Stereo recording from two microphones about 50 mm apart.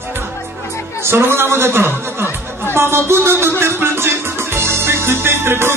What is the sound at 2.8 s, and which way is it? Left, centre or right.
Music, right.